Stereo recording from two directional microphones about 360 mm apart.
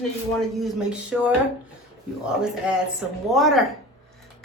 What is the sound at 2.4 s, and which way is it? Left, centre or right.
Speech, centre.